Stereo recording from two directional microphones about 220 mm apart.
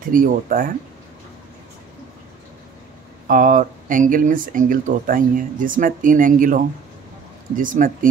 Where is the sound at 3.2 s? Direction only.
35° right (ahead or behind).